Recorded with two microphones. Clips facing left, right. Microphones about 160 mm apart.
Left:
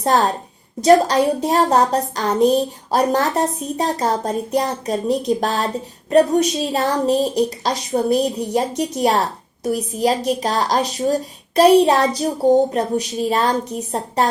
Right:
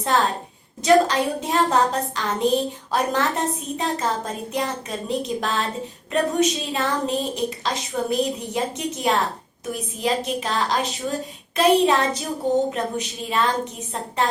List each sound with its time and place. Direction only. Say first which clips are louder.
0.1 s a woman's voice: left 4 dB; 40° left (ahead or behind)